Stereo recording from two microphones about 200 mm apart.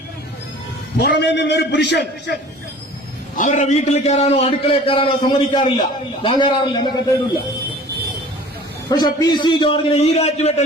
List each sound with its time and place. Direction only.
0.9 s a man's voice: 55° left (ahead or behind)
3.3 s a man's voice: 40° left (ahead or behind); by 7.0 s 25° left (ahead or behind)
8.9 s a man's voice: 20° left (ahead or behind)